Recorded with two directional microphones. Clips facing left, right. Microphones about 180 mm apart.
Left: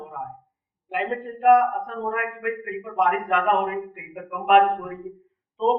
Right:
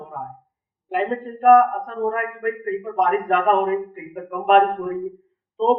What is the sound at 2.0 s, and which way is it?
A man's voice, 40° right (ahead or behind).